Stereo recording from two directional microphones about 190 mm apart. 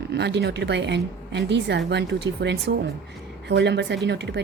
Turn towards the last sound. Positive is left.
turn(degrees=-65)  # may be behind; listen again after turning